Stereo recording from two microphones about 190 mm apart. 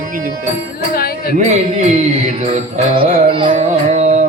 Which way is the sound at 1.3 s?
40° right (ahead or behind).